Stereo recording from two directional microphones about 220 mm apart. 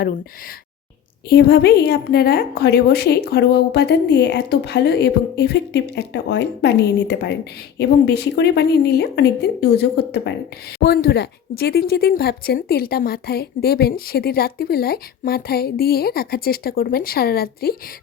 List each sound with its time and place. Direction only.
1.3 s speech: 45° left (ahead or behind)